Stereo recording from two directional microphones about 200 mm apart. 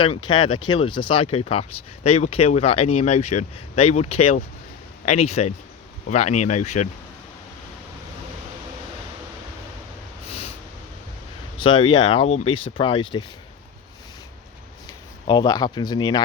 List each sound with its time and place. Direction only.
0.0 s speech: 25° left (ahead or behind)
11.6 s speech: 25° left (ahead or behind)
15.3 s speech: 20° left (ahead or behind)